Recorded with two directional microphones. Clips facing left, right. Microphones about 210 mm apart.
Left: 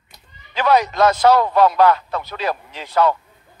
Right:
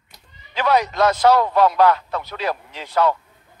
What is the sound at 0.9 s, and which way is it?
Speech, 50° left (ahead or behind).